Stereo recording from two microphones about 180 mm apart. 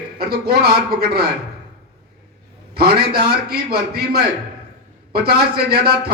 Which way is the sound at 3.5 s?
60° right (ahead or behind).